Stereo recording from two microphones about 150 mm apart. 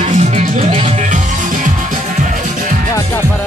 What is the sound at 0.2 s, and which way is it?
Music, 50° right (ahead or behind).